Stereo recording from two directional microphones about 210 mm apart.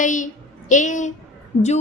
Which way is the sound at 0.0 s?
35° left (ahead or behind).